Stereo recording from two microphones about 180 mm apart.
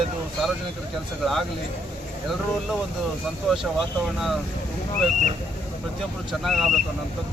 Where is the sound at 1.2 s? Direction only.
Centre (ahead or behind).